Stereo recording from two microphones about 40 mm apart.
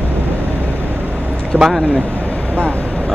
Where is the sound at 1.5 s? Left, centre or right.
Right.